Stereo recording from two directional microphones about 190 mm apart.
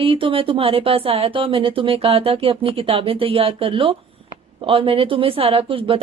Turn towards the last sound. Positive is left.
turn(degrees=-30)  # may be behind; listen again after turning